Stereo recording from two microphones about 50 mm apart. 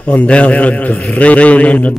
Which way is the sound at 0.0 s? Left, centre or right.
Left.